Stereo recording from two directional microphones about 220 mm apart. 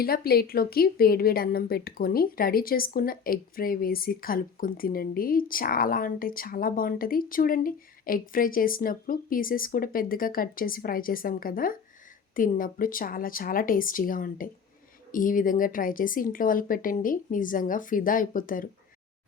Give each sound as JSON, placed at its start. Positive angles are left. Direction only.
{"t": 0.0, "sound": "a woman's voice", "side_deg": 45}